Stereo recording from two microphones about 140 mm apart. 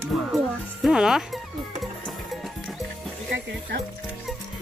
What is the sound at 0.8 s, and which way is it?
Speech, 5° right (ahead or behind).